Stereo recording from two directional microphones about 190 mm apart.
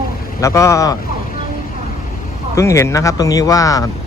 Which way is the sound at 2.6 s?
15° left (ahead or behind).